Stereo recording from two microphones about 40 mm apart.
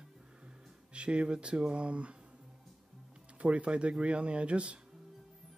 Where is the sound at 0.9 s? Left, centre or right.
Right.